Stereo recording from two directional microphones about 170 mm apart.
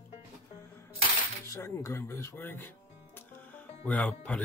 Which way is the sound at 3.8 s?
5° left (ahead or behind).